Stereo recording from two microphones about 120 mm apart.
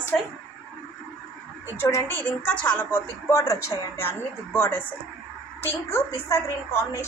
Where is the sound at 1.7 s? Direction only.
20° left (ahead or behind).